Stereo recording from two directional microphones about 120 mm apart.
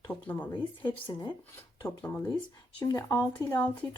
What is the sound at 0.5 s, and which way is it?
Speech, 40° left (ahead or behind).